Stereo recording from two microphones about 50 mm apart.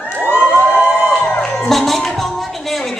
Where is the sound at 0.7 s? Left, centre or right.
Left.